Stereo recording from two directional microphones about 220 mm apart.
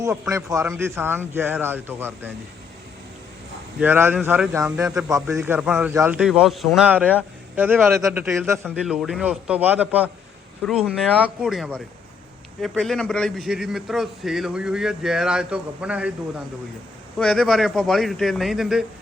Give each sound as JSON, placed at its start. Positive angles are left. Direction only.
{"t": 0.0, "sound": "a man's voice", "side_deg": -15}
{"t": 3.8, "sound": "a man's voice", "side_deg": -10}
{"t": 5.4, "sound": "a man's voice", "side_deg": -5}
{"t": 17.2, "sound": "a man's voice", "side_deg": 5}